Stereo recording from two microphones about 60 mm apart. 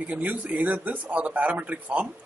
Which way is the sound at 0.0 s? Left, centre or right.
Right.